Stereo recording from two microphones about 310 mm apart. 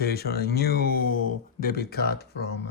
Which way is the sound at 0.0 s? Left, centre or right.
Left.